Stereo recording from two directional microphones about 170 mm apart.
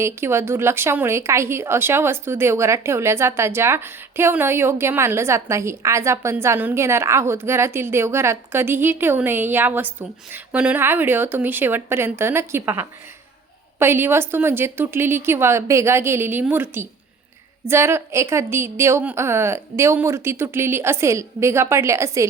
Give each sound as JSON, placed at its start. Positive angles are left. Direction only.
{"t": 0.0, "sound": "a woman's voice", "side_deg": -15}